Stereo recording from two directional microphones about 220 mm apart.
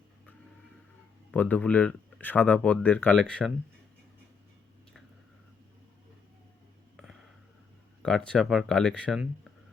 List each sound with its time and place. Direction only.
1.3 s speech: 5° left (ahead or behind)
6.9 s a sound: centre (ahead or behind)
8.0 s speech: 5° left (ahead or behind)